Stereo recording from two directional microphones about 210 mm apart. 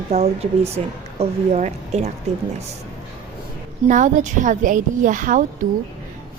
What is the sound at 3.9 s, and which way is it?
Speech, 35° right (ahead or behind).